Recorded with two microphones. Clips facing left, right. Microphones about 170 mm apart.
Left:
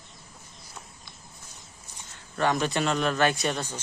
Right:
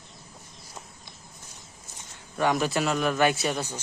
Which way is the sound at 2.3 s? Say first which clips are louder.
Right 1 dB; 10° right (ahead or behind).